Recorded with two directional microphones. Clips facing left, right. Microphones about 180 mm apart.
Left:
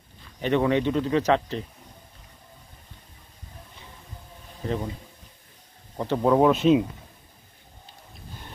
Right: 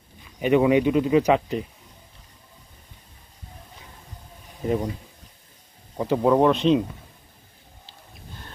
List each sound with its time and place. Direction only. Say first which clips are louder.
0.2 s speech: right 4 dB; 10° right (ahead or behind)
4.6 s speech: right 5 dB; 15° right (ahead or behind)
5.9 s speech: right 1 dB; 5° right (ahead or behind)